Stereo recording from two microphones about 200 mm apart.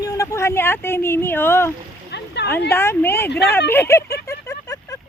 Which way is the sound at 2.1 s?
55° left (ahead or behind).